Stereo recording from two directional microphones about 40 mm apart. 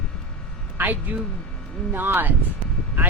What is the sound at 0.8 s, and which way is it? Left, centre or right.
Speech, right.